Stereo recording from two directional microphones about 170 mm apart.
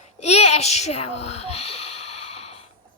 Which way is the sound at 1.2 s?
40° left (ahead or behind).